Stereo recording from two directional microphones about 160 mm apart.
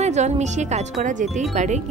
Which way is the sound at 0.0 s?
45° right (ahead or behind).